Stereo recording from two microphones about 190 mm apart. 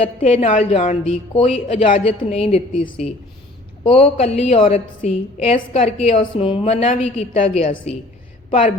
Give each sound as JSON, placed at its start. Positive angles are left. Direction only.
{"t": 0.2, "sound": "a woman's voice", "side_deg": 40}
{"t": 3.8, "sound": "a woman's voice", "side_deg": 30}